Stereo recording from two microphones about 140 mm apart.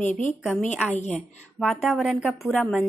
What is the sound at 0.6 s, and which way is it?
Speech, 55° left (ahead or behind).